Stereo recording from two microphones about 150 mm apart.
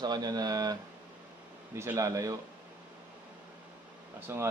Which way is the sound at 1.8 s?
20° right (ahead or behind).